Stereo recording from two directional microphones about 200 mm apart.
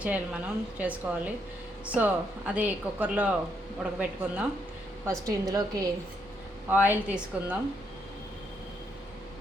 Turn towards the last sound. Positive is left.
turn(degrees=-5)  # may be behind; listen again after turning